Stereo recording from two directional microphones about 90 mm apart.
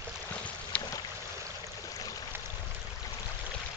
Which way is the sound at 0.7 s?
15° left (ahead or behind).